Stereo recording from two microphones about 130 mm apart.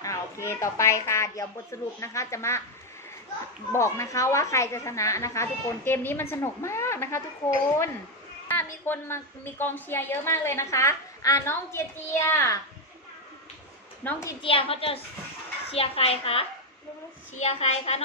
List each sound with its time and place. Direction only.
0.0 s a woman's voice: 20° left (ahead or behind)
3.7 s a woman's voice: 20° left (ahead or behind)
8.5 s a woman's voice: 15° left (ahead or behind)
14.0 s a woman's voice: 15° left (ahead or behind)
14.4 s a woman's voice: 45° left (ahead or behind)